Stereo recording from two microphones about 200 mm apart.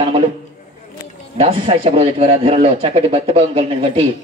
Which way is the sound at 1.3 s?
30° right (ahead or behind).